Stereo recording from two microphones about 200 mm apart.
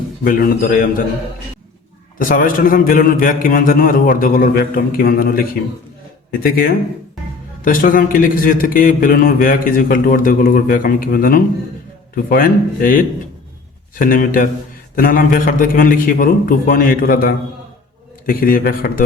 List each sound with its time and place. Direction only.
0.3 s a man's voice: 45° left (ahead or behind)
2.1 s a man's voice: 45° left (ahead or behind)
7.6 s a man's voice: 45° left (ahead or behind)